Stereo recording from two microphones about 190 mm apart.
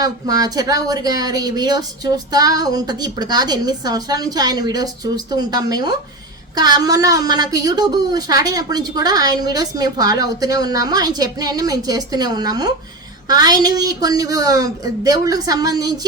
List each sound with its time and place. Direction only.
0.0 s a woman's voice: 20° right (ahead or behind)